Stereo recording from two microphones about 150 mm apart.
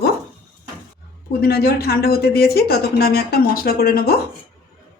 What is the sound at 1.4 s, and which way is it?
Speech, 90° left.